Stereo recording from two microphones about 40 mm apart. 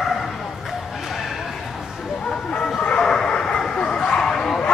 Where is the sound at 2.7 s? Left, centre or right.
Left.